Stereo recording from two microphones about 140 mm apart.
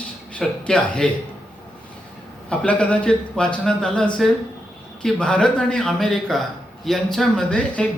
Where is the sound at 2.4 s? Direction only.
10° left (ahead or behind).